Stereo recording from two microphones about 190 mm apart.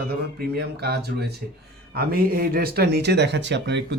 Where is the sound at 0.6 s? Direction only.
60° right (ahead or behind).